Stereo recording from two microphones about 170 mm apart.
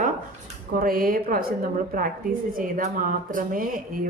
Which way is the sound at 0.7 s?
55° right (ahead or behind).